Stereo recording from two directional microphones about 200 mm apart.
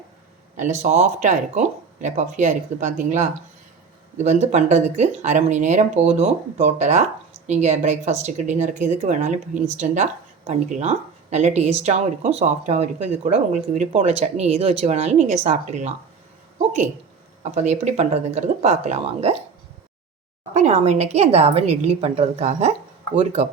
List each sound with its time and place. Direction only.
0.5 s speech: 35° right (ahead or behind)
17.4 s speech: 35° right (ahead or behind)
20.5 s speech: 35° right (ahead or behind)